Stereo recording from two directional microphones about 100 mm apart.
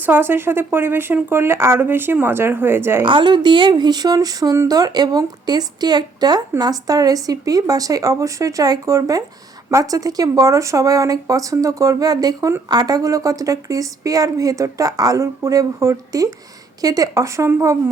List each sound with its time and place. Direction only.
0.0 s speech: 20° right (ahead or behind)
3.0 s a woman's voice: 55° right (ahead or behind); by 17.7 s 30° right (ahead or behind)